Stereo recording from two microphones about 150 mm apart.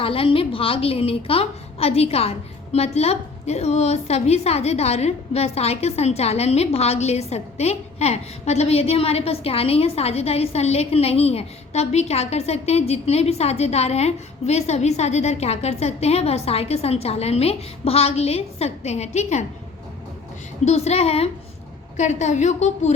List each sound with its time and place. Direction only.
0.0 s a woman's voice: 40° left (ahead or behind)
20.7 s a woman's voice: 45° left (ahead or behind)